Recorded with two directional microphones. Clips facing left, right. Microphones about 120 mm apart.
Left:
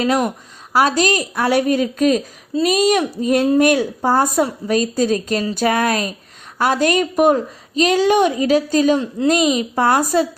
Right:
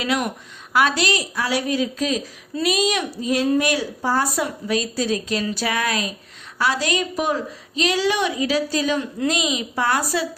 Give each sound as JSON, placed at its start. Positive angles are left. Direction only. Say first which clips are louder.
{"t": 0.0, "sound": "a woman's voice", "louder": "left 6 dB", "side_deg": 40}